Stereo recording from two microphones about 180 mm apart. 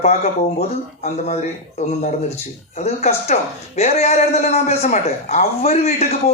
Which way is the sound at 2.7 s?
40° left (ahead or behind).